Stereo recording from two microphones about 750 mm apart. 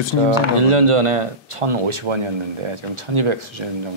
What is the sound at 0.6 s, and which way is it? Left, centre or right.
Speech, right.